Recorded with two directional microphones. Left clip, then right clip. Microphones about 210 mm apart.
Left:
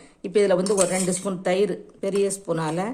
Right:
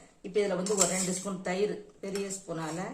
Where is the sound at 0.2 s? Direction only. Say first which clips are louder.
Left 9 dB; 45° left (ahead or behind).